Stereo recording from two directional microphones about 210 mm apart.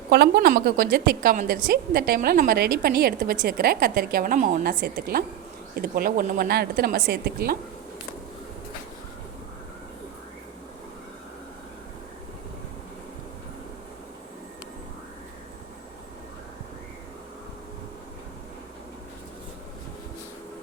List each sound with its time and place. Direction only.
0.1 s a woman's voice: 50° right (ahead or behind)